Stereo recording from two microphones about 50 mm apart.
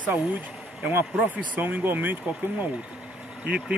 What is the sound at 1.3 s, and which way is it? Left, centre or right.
Speech, right.